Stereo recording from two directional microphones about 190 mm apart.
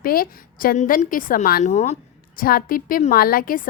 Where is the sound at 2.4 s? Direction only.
50° left (ahead or behind).